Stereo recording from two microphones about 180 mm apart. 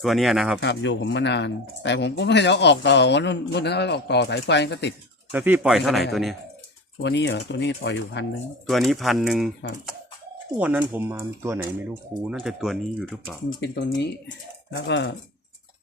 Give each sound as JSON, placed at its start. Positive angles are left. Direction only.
{"t": 0.0, "sound": "speech", "side_deg": 0}
{"t": 0.6, "sound": "speech", "side_deg": 75}
{"t": 5.3, "sound": "speech", "side_deg": -10}
{"t": 7.0, "sound": "speech", "side_deg": 75}
{"t": 8.6, "sound": "speech", "side_deg": 0}
{"t": 10.6, "sound": "speech", "side_deg": -5}
{"t": 12.2, "sound": "speech", "side_deg": -5}
{"t": 13.6, "sound": "speech", "side_deg": 70}